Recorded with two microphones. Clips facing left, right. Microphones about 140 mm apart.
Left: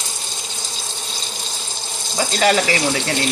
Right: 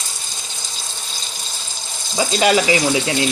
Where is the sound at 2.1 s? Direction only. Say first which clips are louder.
Right 1 dB; 15° right (ahead or behind).